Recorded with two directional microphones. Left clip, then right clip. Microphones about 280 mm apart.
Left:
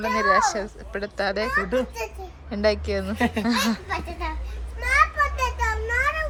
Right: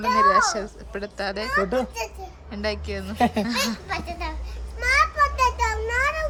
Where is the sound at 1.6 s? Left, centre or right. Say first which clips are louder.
Right 4 dB; right.